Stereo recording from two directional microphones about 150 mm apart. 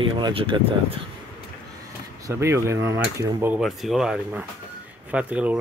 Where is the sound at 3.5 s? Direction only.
Centre (ahead or behind).